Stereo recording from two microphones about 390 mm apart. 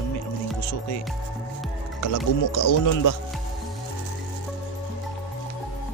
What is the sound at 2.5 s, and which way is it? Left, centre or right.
Speech, left.